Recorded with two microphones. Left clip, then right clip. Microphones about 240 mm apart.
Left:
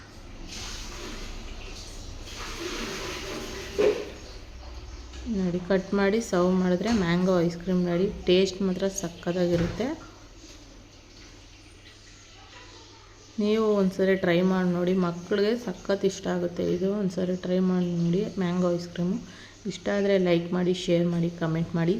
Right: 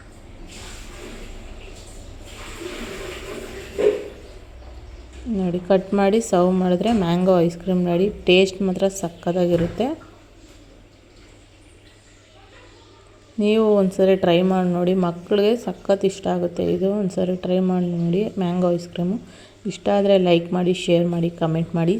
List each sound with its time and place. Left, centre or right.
5.4 s speech: centre
13.4 s speech: centre